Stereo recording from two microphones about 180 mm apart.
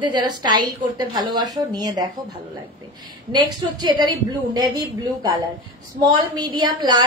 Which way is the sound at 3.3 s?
25° right (ahead or behind).